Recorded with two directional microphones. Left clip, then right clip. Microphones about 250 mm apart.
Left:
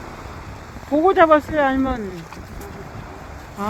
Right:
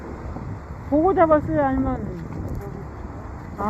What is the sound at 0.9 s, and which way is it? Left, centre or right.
Speech, left.